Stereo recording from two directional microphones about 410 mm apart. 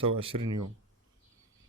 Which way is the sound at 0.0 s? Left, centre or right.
Centre.